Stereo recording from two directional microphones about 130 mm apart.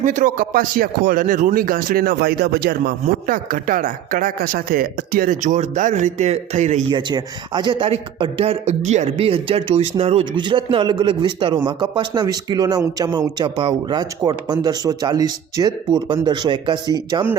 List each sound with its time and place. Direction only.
0.0 s speech: 90° right
3.2 s speech: 90° right; by 6.8 s 60° right (ahead or behind)
6.9 s a man's voice: 35° right (ahead or behind); by 10.2 s 50° right (ahead or behind)
10.3 s speech: 40° right (ahead or behind)